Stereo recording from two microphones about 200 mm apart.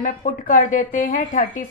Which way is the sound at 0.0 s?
40° left (ahead or behind).